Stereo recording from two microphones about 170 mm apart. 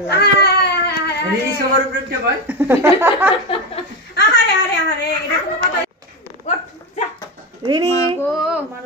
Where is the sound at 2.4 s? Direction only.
10° right (ahead or behind).